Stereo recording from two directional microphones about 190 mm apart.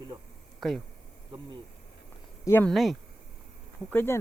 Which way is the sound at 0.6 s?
Centre (ahead or behind).